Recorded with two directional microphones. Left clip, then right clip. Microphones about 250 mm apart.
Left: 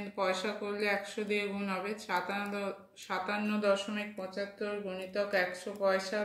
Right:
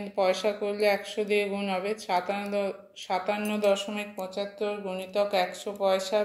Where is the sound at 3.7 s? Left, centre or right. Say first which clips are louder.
Right 4 dB; centre.